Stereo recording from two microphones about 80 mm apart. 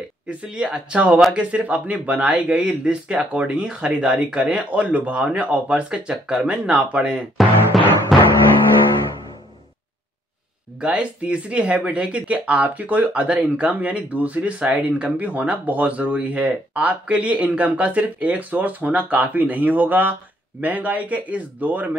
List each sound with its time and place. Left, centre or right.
0.3 s speech: centre
8.1 s music: centre
10.8 s speech: centre